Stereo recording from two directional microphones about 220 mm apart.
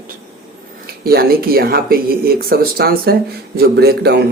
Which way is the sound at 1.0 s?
45° right (ahead or behind).